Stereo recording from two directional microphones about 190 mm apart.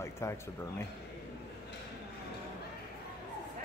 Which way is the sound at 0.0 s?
15° left (ahead or behind).